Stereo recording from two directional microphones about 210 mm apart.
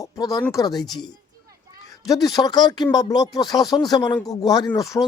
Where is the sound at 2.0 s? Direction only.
20° left (ahead or behind).